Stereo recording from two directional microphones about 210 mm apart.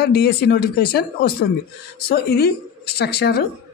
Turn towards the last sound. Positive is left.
turn(degrees=50)  # may be behind; listen again after turning